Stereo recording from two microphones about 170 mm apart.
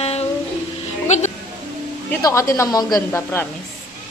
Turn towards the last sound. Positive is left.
turn(degrees=20)  # may be behind; listen again after turning